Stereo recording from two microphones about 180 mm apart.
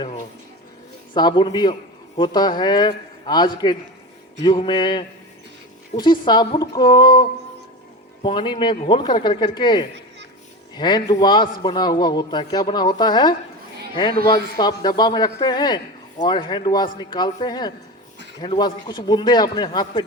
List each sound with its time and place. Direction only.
1.1 s a man's voice: 25° left (ahead or behind)